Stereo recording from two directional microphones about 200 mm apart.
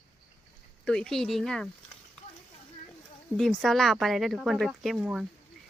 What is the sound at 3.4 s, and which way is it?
Speech, centre (ahead or behind).